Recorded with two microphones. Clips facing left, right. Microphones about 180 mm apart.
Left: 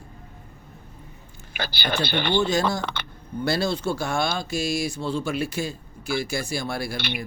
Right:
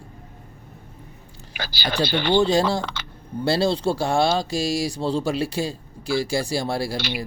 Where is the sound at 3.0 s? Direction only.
55° left (ahead or behind).